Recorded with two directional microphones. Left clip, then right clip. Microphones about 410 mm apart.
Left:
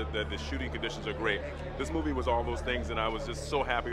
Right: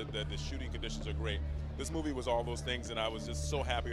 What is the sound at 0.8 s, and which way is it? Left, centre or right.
Speech, right.